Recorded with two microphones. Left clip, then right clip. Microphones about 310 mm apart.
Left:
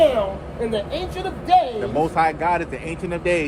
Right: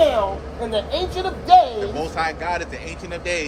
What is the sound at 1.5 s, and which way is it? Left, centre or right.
Speech, centre.